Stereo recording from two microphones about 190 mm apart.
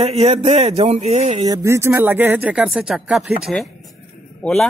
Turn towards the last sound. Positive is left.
turn(degrees=5)  # may be behind; listen again after turning